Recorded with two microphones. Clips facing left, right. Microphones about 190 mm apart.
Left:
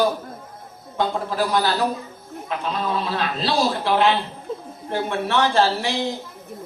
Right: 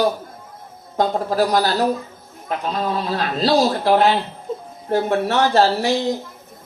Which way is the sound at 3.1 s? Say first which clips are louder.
Right 8 dB; 40° right (ahead or behind).